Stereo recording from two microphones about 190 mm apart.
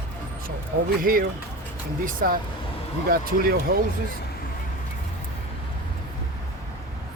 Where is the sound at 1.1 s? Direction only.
50° right (ahead or behind).